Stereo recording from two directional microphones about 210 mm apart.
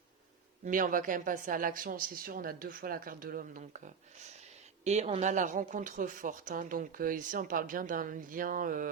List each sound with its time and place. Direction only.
0.6 s speech: 40° right (ahead or behind)